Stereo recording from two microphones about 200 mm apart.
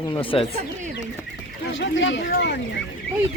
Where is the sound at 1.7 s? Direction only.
70° left (ahead or behind).